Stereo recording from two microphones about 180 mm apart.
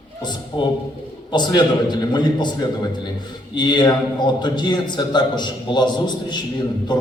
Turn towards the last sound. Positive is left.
turn(degrees=25)  # may be behind; listen again after turning